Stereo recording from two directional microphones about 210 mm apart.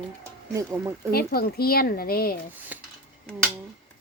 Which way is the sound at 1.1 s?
45° left (ahead or behind).